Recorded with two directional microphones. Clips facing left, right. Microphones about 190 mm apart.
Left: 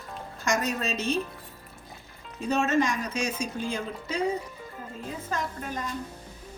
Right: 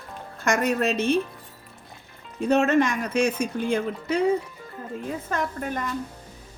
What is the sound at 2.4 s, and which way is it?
Speech, 60° right (ahead or behind).